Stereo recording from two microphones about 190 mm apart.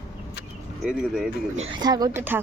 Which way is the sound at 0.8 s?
5° right (ahead or behind).